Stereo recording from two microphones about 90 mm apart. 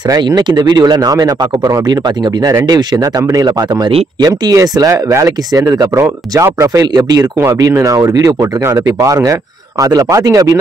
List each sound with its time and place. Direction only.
0.2 s speech: 55° right (ahead or behind); by 10.6 s 40° right (ahead or behind)